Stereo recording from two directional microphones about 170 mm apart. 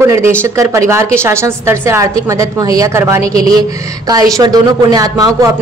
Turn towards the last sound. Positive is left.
turn(degrees=-20)  # may be behind; listen again after turning